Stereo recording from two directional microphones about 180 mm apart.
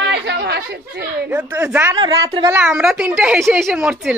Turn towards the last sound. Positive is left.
turn(degrees=-5)  # may be behind; listen again after turning